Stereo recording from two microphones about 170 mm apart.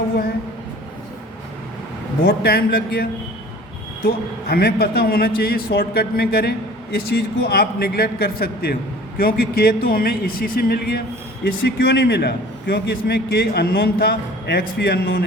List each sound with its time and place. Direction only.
2.2 s a man's voice: 65° left (ahead or behind)